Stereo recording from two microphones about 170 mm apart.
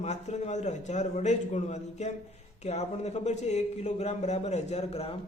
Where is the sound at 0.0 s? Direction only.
40° left (ahead or behind).